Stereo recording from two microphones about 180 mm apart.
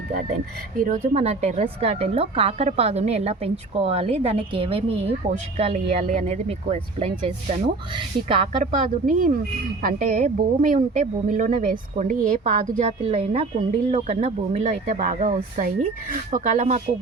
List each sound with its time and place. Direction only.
0.9 s a woman's voice: 35° right (ahead or behind)
8.6 s speech: 50° right (ahead or behind)
13.1 s a woman's voice: 35° right (ahead or behind)